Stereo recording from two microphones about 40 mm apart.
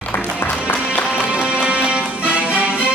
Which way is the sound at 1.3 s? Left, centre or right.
Right.